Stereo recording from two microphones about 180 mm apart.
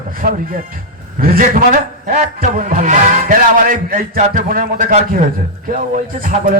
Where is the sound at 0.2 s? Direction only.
55° right (ahead or behind).